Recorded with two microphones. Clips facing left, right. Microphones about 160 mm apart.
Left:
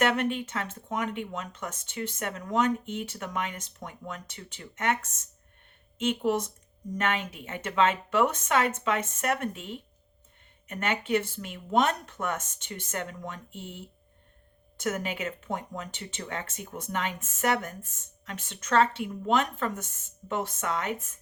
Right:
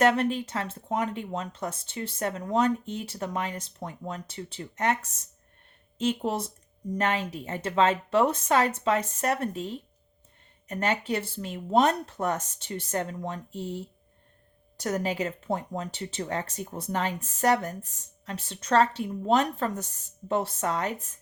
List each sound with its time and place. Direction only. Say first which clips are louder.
0.0 s speech: right 3 dB; 35° right (ahead or behind)